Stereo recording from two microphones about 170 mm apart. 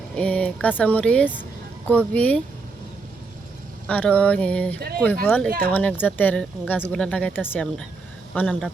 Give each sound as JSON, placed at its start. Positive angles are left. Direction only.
{"t": 0.2, "sound": "speech", "side_deg": 5}
{"t": 3.8, "sound": "speech", "side_deg": 5}
{"t": 5.5, "sound": "speech", "side_deg": -60}
{"t": 5.7, "sound": "speech", "side_deg": 10}